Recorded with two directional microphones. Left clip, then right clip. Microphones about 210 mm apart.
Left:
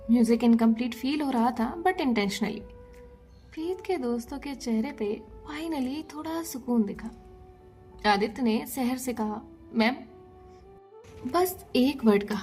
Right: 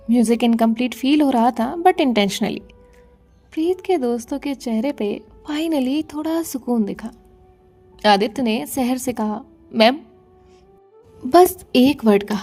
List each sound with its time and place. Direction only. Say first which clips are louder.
0.1 s a woman's voice: right 6 dB; 40° right (ahead or behind)
11.3 s a woman's voice: right 13 dB; 45° right (ahead or behind)